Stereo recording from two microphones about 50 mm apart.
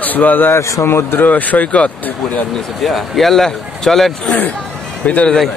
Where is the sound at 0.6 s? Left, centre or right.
Left.